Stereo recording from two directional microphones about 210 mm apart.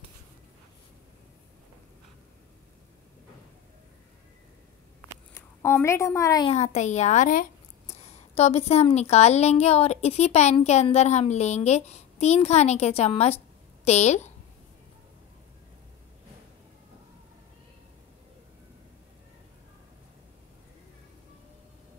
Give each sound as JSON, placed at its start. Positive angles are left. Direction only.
{"t": 5.3, "sound": "a woman's voice", "side_deg": 10}
{"t": 6.5, "sound": "a woman's voice", "side_deg": 35}